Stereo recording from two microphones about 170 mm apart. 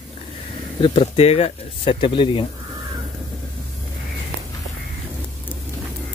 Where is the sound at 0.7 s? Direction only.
35° left (ahead or behind).